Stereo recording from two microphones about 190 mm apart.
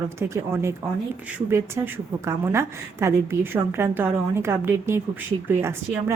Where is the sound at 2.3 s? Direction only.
15° right (ahead or behind).